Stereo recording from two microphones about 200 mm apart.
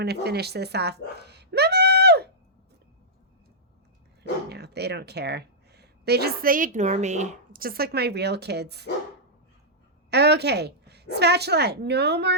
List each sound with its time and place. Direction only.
0.0 s a sound: 55° right (ahead or behind)
4.2 s speech: 55° right (ahead or behind)
10.1 s a woman's voice: 55° right (ahead or behind)